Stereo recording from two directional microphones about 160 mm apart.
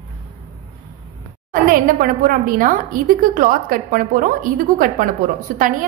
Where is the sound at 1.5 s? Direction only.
60° right (ahead or behind).